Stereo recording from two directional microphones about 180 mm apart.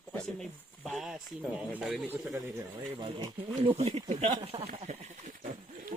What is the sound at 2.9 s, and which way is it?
Speech, 30° right (ahead or behind).